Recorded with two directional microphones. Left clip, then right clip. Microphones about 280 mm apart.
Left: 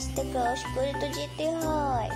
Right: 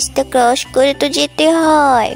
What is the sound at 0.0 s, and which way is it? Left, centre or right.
Speech, right.